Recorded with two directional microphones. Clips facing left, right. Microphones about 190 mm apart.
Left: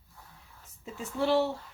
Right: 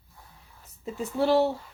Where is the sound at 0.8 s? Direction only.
40° right (ahead or behind).